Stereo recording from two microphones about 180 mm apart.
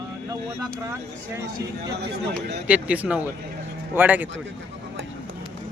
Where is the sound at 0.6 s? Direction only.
15° right (ahead or behind).